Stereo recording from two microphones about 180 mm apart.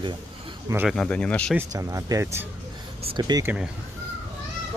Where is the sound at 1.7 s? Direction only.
15° right (ahead or behind).